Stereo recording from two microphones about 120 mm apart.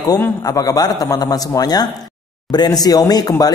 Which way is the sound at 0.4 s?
30° left (ahead or behind).